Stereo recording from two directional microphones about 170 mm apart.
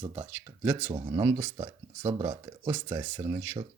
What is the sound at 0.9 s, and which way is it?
Speech, 25° right (ahead or behind).